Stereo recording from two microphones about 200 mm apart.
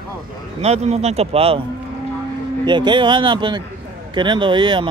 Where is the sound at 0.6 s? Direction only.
30° right (ahead or behind).